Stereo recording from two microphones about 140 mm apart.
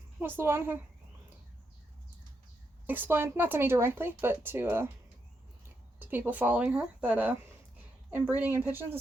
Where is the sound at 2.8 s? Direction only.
15° right (ahead or behind).